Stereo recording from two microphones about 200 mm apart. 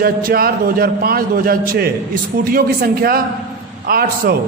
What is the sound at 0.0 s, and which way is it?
A man's voice, 45° right (ahead or behind).